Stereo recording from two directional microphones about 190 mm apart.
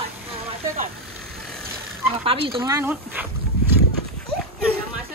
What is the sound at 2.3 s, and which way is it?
Speech, 30° right (ahead or behind).